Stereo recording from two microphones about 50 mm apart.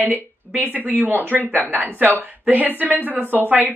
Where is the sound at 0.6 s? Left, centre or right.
Right.